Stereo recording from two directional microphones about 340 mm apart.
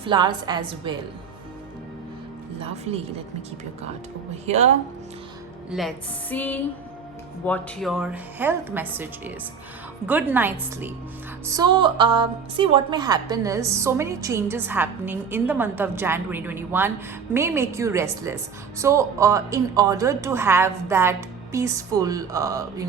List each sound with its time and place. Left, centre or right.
0.0 s a woman's voice: centre
4.4 s speech: centre
5.7 s a woman's voice: centre